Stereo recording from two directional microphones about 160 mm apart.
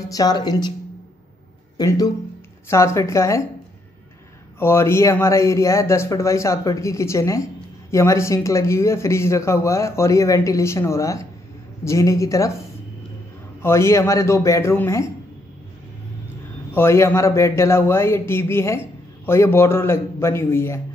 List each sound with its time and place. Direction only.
0.1 s a man's voice: 25° left (ahead or behind)
1.8 s a man's voice: 25° left (ahead or behind)
4.6 s a man's voice: 15° left (ahead or behind)
13.6 s a man's voice: 15° left (ahead or behind)
16.7 s a man's voice: 15° left (ahead or behind)